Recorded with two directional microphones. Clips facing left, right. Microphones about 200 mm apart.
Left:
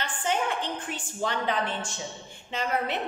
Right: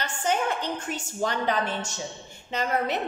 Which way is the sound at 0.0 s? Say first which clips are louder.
Right 2 dB; 40° right (ahead or behind).